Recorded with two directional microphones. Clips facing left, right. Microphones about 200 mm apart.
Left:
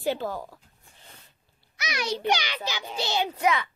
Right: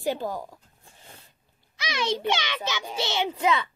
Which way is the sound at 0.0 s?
15° right (ahead or behind).